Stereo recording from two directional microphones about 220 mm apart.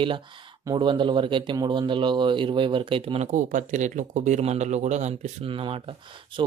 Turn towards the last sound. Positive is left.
turn(degrees=-25)  # may be behind; listen again after turning